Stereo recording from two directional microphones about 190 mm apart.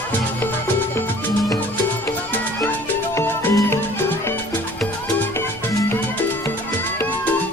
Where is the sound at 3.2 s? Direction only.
10° left (ahead or behind).